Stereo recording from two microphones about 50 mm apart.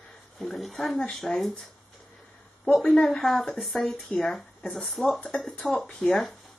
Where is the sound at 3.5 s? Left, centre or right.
Centre.